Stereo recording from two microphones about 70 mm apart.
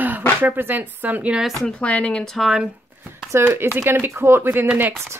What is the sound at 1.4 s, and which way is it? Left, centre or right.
Speech, centre.